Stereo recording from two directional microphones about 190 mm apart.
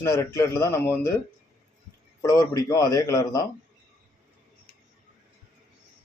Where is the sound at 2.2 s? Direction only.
15° left (ahead or behind).